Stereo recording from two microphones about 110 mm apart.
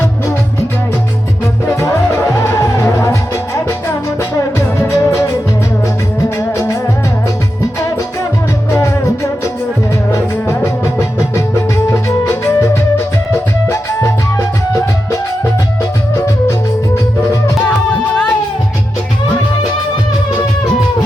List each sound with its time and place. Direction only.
1.7 s music: 25° left (ahead or behind)
6.5 s music: 25° left (ahead or behind)
10.1 s music: 30° left (ahead or behind)
17.7 s music: 10° left (ahead or behind)